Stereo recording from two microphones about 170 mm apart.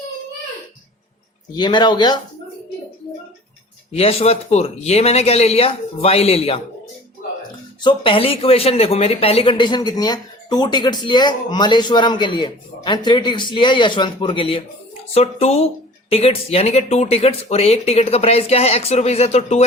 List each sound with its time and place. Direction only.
1.5 s speech: 25° left (ahead or behind)
3.9 s speech: 35° left (ahead or behind)
7.8 s speech: 30° left (ahead or behind)